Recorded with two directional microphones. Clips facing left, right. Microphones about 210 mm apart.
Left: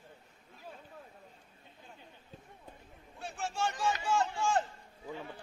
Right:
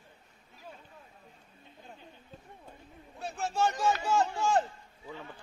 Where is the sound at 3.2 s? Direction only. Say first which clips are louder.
Right 5 dB; 40° right (ahead or behind).